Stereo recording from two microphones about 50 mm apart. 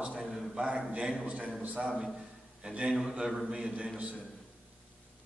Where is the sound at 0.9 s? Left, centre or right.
Centre.